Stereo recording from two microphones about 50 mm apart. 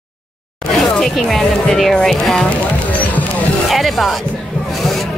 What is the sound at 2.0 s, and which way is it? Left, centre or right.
Speech, centre.